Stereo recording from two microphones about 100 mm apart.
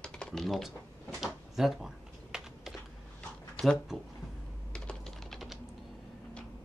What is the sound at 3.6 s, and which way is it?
Speech, 10° left (ahead or behind).